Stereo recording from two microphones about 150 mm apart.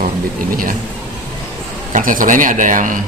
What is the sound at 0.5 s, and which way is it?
Speech, 65° right (ahead or behind).